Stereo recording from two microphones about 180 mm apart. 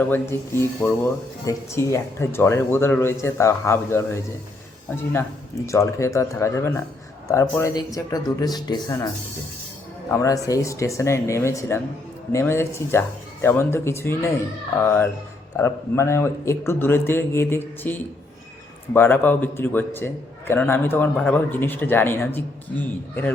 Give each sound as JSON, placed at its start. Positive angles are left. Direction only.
{"t": 0.0, "sound": "speech", "side_deg": 10}
{"t": 5.6, "sound": "speech", "side_deg": 15}
{"t": 10.1, "sound": "speech", "side_deg": 15}